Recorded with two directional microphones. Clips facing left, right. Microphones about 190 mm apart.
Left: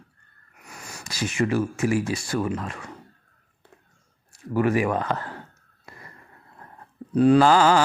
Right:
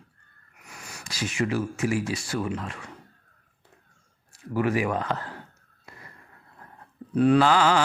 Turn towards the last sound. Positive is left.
turn(degrees=40)  # may be behind; listen again after turning